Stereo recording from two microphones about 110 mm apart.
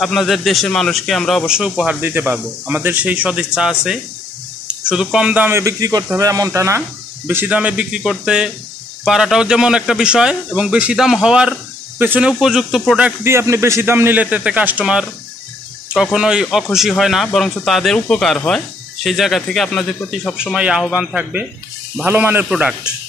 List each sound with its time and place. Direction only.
0.0 s speech: centre (ahead or behind)
2.0 s speech: 20° right (ahead or behind)
7.2 s speech: 15° right (ahead or behind)
13.2 s speech: 25° right (ahead or behind); by 20.0 s 5° left (ahead or behind)
20.5 s speech: 10° right (ahead or behind)
22.5 s speech: 5° right (ahead or behind)